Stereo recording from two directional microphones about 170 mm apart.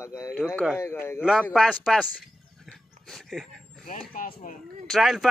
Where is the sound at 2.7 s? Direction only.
Centre (ahead or behind).